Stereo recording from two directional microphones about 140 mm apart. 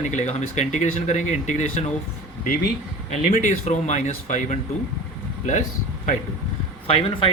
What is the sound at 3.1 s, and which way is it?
Speech, 65° left (ahead or behind).